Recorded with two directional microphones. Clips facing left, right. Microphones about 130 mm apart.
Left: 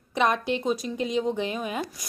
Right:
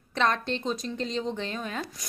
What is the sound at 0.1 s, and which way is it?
A woman's voice, 10° left (ahead or behind).